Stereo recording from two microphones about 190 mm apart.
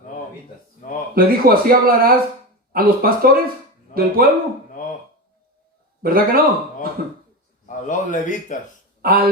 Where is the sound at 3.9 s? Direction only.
45° left (ahead or behind).